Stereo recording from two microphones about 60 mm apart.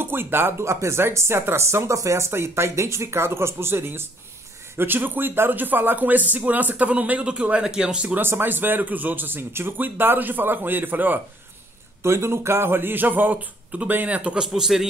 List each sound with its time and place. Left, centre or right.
0.0 s speech: right; by 8.2 s centre
8.2 s speech: right
12.0 s speech: right
14.5 s a man's voice: centre